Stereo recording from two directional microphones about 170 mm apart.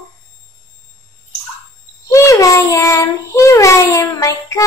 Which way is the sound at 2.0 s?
20° left (ahead or behind).